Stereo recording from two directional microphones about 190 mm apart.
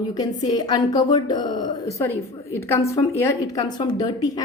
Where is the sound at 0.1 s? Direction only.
20° left (ahead or behind).